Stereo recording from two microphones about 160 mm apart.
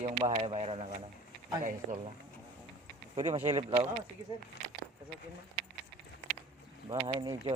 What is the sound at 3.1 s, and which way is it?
Speech, 35° right (ahead or behind).